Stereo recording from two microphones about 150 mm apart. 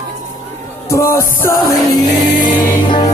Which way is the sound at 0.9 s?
20° left (ahead or behind).